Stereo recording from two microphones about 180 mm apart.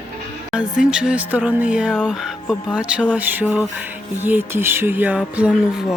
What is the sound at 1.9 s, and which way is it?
Speech, centre (ahead or behind).